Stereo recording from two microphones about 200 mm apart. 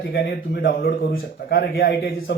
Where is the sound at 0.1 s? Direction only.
55° left (ahead or behind).